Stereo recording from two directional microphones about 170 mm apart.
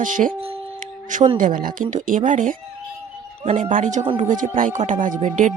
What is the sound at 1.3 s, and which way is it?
Speech, 55° right (ahead or behind).